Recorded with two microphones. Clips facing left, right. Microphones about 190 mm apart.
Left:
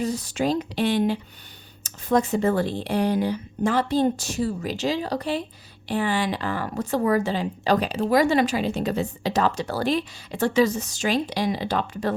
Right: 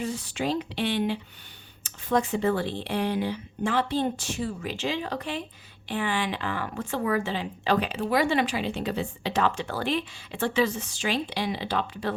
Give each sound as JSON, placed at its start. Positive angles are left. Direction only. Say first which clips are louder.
{"t": 0.0, "sound": "speech", "louder": "left 5 dB", "side_deg": 40}